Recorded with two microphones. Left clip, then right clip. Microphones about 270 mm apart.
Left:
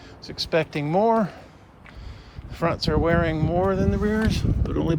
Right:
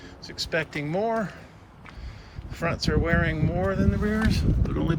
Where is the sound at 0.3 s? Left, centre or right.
Centre.